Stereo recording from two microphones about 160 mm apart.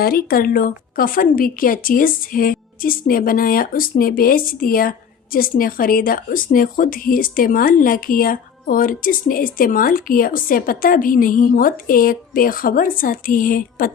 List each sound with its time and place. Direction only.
0.0 s a woman's voice: 70° left (ahead or behind)